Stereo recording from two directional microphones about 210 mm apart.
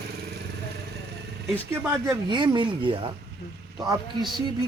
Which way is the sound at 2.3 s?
20° right (ahead or behind).